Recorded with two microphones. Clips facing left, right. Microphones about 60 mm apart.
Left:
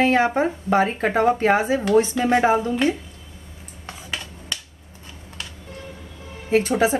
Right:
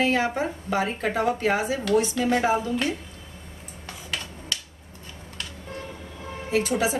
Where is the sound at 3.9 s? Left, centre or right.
Left.